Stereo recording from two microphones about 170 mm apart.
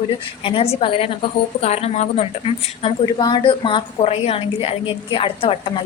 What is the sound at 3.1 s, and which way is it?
A woman's voice, 25° left (ahead or behind).